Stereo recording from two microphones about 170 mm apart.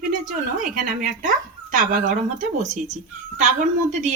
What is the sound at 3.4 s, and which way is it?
Speech, 45° right (ahead or behind).